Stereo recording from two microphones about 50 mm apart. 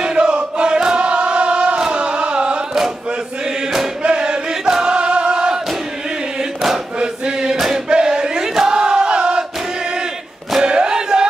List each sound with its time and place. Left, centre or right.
0.0 s choir: centre
4.0 s chant: centre
4.9 s choir: right
7.0 s chant: centre
7.9 s battle cry: centre
10.6 s a sound: centre